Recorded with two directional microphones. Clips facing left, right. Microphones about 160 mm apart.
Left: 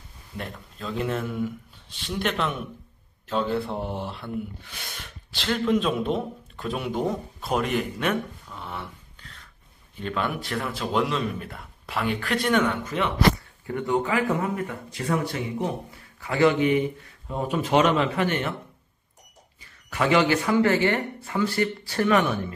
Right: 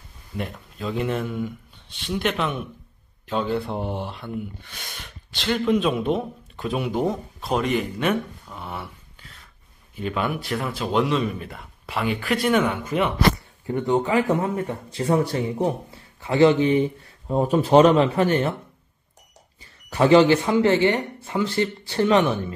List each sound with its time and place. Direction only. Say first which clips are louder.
0.4 s a man's voice: right 5 dB; 5° right (ahead or behind)
8.5 s a sound: right 2 dB; 10° right (ahead or behind)
9.9 s a man's voice: right 2 dB; 5° right (ahead or behind)
13.7 s speech: right 3 dB; 25° right (ahead or behind)
19.9 s speech: right 6 dB; 30° right (ahead or behind)